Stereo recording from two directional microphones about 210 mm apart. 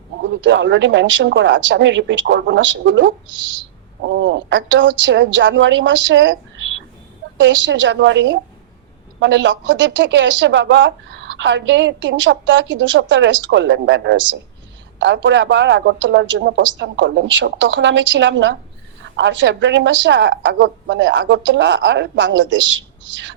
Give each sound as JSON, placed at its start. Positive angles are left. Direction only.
{"t": 0.2, "sound": "speech", "side_deg": -55}